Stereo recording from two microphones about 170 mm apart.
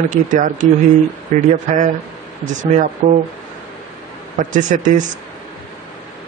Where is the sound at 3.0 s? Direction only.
45° right (ahead or behind).